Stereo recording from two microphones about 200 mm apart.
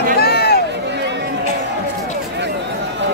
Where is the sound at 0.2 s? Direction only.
50° left (ahead or behind).